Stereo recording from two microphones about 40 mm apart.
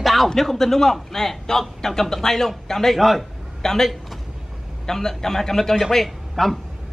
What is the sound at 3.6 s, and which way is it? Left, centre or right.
A man's voice, centre.